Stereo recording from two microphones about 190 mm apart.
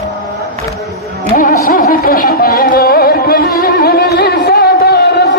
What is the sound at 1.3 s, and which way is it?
Carnatic music, 50° left (ahead or behind).